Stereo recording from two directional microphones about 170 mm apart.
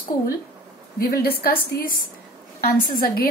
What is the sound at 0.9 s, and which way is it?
A woman's voice, 65° left (ahead or behind).